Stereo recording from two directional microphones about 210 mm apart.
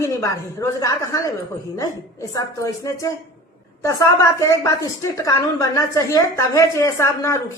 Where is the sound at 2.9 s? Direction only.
15° left (ahead or behind).